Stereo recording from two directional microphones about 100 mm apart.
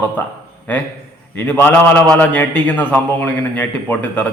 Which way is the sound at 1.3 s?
15° left (ahead or behind).